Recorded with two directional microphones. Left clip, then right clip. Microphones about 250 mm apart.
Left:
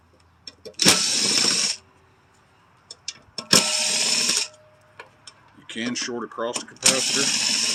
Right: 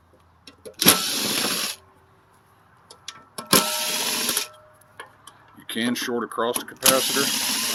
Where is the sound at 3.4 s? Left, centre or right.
Centre.